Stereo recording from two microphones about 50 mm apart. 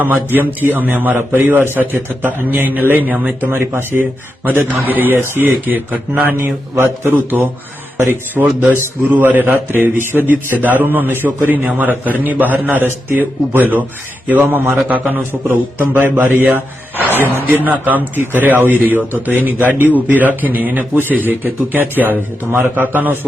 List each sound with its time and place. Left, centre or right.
0.0 s a man's voice: right
6.3 s a man's voice: right
8.4 s speech: right